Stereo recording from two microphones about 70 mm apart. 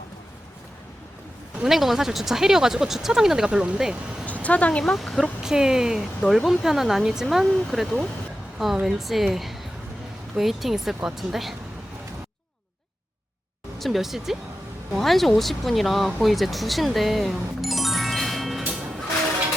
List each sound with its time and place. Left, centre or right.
1.5 s speech: centre
4.4 s speech: centre
4.9 s speech: centre
13.7 s speech: centre
18.7 s music: centre